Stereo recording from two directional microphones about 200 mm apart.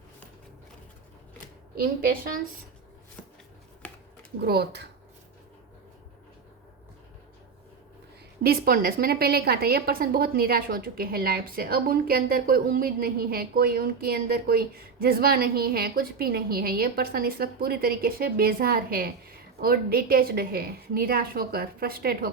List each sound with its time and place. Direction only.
1.7 s a woman's voice: 45° right (ahead or behind)
4.4 s speech: 55° right (ahead or behind)
8.4 s a woman's voice: 45° right (ahead or behind)